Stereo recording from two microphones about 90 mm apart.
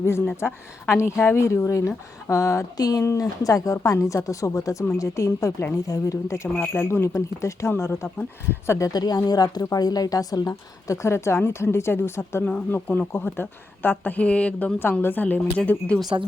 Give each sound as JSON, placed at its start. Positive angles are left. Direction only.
{"t": 0.0, "sound": "speech", "side_deg": 30}
{"t": 8.9, "sound": "speech", "side_deg": 50}